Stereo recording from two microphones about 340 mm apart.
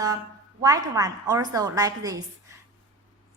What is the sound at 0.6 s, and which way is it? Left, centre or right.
A woman's voice, centre.